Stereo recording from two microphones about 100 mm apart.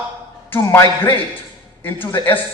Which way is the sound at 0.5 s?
20° left (ahead or behind).